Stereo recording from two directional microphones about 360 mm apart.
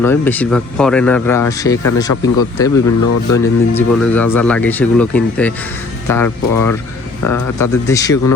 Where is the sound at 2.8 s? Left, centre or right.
Left.